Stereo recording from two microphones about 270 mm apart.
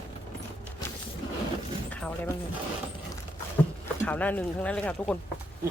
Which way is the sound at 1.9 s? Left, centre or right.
Centre.